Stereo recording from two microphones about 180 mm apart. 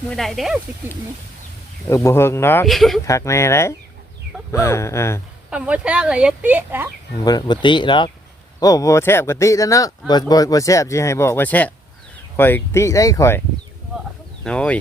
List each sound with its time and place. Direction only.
0.1 s speech: centre (ahead or behind)
1.9 s speech: 15° left (ahead or behind)
2.6 s speech: centre (ahead or behind)
3.1 s speech: 15° left (ahead or behind)
5.5 s speech: 5° right (ahead or behind)
7.3 s speech: 25° left (ahead or behind)
14.4 s speech: 5° left (ahead or behind)